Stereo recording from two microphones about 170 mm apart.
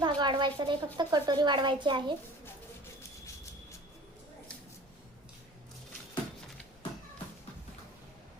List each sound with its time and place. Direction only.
0.0 s speech: 25° right (ahead or behind)